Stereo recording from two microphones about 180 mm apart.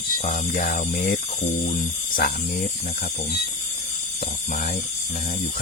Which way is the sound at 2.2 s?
55° left (ahead or behind).